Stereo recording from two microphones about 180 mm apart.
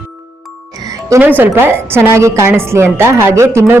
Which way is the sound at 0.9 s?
15° right (ahead or behind).